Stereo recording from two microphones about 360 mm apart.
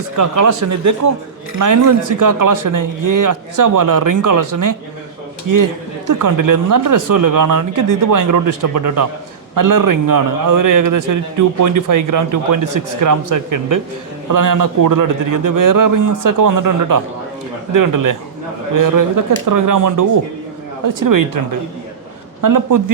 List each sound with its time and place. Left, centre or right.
0.2 s a man's voice: right
22.4 s a man's voice: right